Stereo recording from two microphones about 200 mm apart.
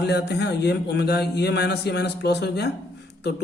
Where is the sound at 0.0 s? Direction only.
55° left (ahead or behind).